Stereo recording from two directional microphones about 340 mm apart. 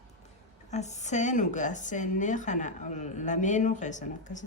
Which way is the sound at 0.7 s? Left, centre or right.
Centre.